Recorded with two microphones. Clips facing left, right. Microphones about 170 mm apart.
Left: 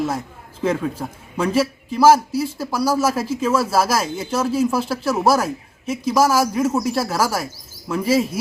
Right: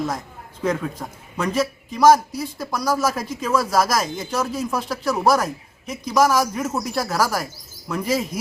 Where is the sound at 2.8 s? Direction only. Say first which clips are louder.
Left 3 dB; 30° left (ahead or behind).